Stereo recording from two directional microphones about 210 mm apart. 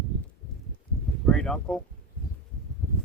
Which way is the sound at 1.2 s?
5° left (ahead or behind).